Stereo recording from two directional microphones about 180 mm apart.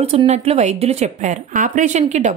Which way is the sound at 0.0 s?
35° right (ahead or behind).